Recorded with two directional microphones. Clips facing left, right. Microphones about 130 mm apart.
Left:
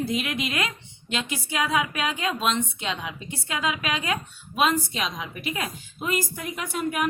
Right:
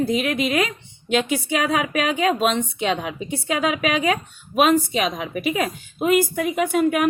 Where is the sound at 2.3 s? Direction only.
60° right (ahead or behind).